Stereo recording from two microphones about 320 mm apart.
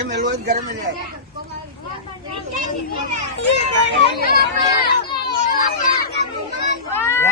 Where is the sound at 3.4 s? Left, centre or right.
Left.